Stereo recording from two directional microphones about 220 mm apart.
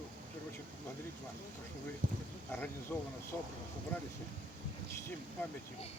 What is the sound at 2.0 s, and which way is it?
Speech, 40° right (ahead or behind).